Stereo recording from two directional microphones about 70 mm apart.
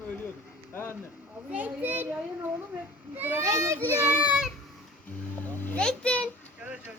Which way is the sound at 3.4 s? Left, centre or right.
Right.